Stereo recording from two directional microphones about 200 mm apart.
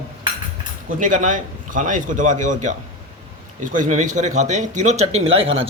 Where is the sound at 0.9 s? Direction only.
40° right (ahead or behind).